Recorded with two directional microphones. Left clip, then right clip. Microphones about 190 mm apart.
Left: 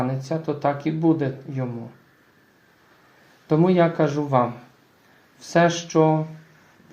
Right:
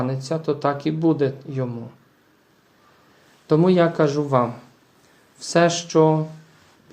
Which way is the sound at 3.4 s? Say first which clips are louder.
Right 2 dB; 30° right (ahead or behind).